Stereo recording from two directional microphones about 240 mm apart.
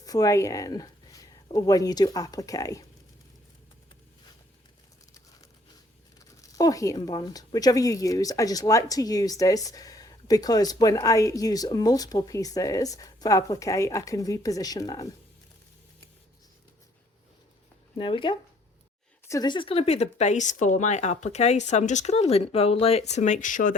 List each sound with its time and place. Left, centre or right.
0.0 s speech: centre
6.1 s speech: centre
17.9 s speech: left